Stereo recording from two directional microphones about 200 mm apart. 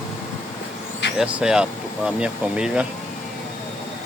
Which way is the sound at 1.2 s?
5° right (ahead or behind).